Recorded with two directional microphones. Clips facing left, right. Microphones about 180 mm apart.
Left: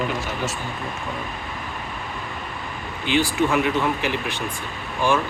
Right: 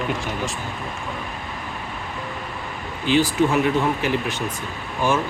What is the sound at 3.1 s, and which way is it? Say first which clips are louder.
Speech: right 2 dB; 40° right (ahead or behind).